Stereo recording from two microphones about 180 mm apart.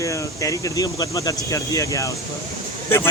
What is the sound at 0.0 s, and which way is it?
Speech, 20° left (ahead or behind).